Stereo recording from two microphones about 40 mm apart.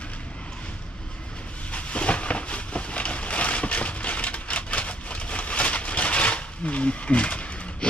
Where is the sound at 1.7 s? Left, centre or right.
Left.